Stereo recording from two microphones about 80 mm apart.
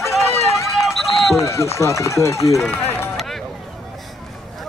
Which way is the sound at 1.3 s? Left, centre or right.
Left.